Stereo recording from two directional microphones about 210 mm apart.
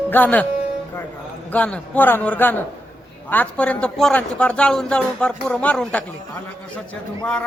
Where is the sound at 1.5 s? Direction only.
5° left (ahead or behind).